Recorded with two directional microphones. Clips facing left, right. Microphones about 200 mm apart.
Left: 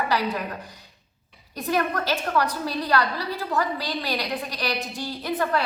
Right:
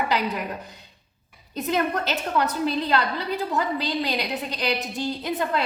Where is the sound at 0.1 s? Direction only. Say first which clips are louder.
Even; 20° right (ahead or behind).